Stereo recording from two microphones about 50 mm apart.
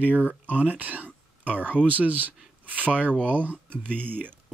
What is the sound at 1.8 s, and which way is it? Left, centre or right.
Speech, right.